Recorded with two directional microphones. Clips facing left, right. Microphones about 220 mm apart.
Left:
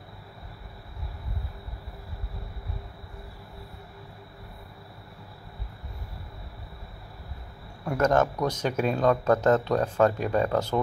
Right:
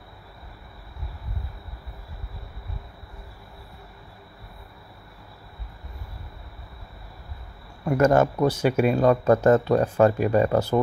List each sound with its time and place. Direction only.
7.8 s speech: 5° right (ahead or behind)